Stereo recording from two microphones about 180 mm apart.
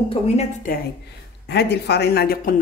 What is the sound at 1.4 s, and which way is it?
A woman's voice, 70° left (ahead or behind).